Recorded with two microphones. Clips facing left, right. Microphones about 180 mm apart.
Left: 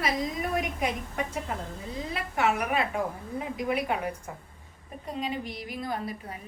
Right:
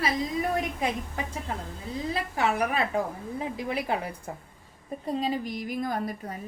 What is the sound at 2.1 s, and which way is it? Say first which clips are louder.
A woman's voice: even; 35° right (ahead or behind).